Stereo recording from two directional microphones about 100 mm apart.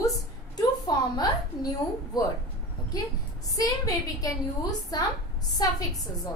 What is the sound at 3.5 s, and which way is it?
A woman's voice, 35° left (ahead or behind).